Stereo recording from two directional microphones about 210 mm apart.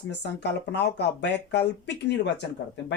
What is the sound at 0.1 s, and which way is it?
Speech, 55° left (ahead or behind).